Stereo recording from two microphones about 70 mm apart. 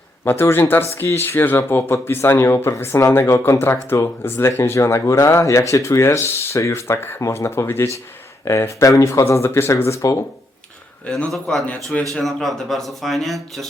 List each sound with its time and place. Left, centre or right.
0.3 s speech: left
7.2 s speech: left
8.8 s speech: left
11.5 s speech: centre
12.2 s speech: centre